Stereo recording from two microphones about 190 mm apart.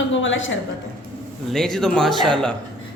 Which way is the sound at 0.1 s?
85° left.